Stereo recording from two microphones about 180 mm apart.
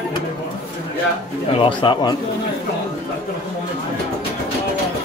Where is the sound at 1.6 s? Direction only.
25° left (ahead or behind).